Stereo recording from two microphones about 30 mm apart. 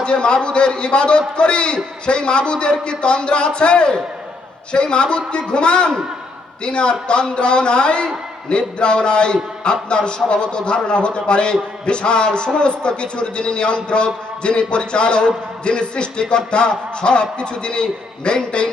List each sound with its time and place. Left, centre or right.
0.0 s a man's voice: left